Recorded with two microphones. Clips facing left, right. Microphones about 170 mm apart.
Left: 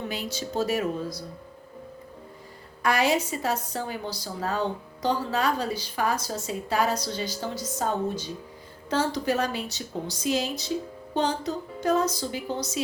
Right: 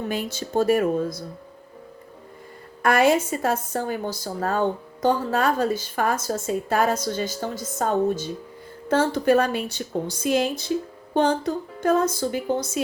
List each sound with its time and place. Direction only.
0.1 s a woman's voice: 50° right (ahead or behind)
2.8 s a woman's voice: 50° right (ahead or behind)